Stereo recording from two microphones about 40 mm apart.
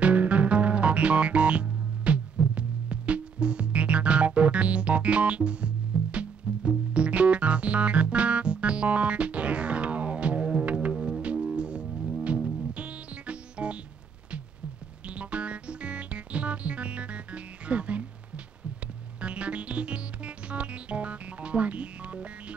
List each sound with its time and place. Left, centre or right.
0.0 s music: right
11.0 s music: right
15.0 s music: right
19.2 s music: right